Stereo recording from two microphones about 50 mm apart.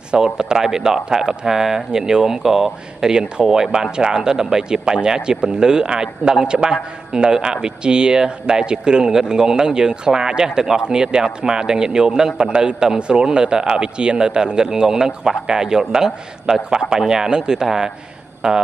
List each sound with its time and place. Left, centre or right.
0.1 s speech: centre